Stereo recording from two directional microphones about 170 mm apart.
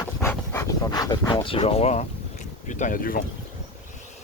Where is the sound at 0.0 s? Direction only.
15° left (ahead or behind); by 2.0 s 40° left (ahead or behind).